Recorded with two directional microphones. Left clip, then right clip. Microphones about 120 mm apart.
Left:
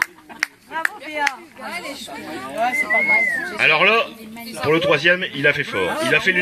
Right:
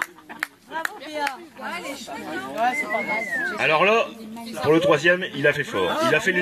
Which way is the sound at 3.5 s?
65° right (ahead or behind).